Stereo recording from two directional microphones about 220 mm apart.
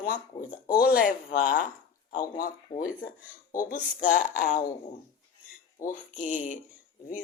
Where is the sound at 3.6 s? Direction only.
35° left (ahead or behind).